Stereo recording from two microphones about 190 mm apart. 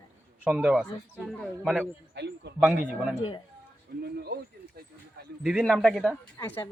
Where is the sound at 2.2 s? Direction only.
65° right (ahead or behind).